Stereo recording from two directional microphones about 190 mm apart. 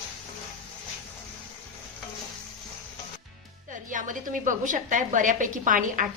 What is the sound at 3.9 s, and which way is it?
A woman's voice, 45° right (ahead or behind).